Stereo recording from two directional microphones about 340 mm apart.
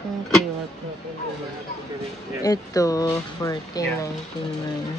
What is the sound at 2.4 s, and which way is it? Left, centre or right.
Speech, centre.